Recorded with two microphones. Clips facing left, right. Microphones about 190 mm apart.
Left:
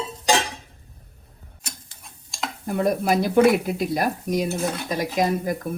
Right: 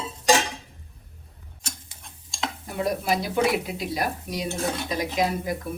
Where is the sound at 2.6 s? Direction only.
55° left (ahead or behind).